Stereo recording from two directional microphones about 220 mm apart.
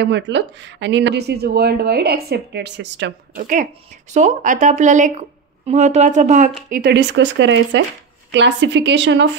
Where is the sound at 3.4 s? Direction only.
35° right (ahead or behind).